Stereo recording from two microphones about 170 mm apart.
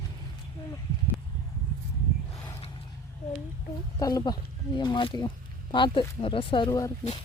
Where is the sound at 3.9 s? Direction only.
20° left (ahead or behind).